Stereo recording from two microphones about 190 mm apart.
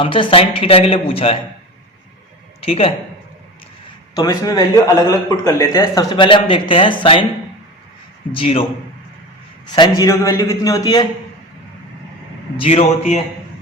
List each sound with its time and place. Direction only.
0.0 s a man's voice: 25° left (ahead or behind)
2.6 s speech: 30° left (ahead or behind)
4.1 s a man's voice: 20° left (ahead or behind)
8.3 s a man's voice: 30° left (ahead or behind)
10.0 s a man's voice: 15° left (ahead or behind)
12.5 s a man's voice: 30° left (ahead or behind)